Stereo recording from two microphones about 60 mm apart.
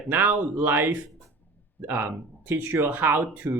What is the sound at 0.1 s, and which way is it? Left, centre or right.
Speech, right.